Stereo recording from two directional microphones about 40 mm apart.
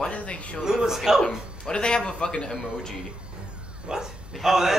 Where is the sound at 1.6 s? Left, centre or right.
Left.